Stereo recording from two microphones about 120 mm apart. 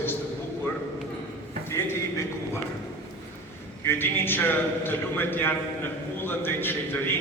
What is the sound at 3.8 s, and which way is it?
A man's voice, 20° left (ahead or behind).